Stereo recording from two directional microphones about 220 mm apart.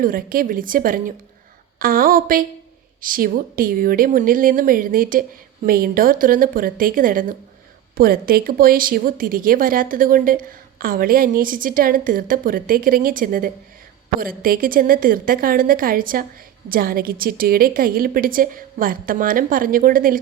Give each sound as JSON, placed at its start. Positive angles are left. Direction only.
{"t": 0.0, "sound": "speech", "side_deg": -40}